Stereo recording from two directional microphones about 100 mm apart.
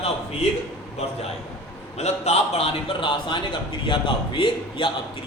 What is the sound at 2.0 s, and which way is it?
Speech, 90° left.